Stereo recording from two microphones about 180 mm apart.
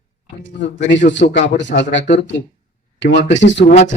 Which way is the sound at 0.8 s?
90° left.